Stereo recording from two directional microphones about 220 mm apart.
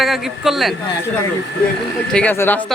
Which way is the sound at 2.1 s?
5° left (ahead or behind).